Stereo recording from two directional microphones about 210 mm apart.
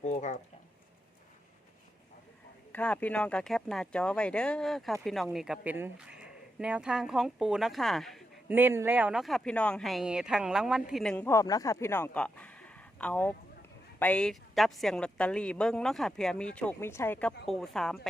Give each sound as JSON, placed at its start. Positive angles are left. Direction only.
{"t": 0.0, "sound": "a sound", "side_deg": 35}
{"t": 2.7, "sound": "speech", "side_deg": 5}
{"t": 8.5, "sound": "speech", "side_deg": -10}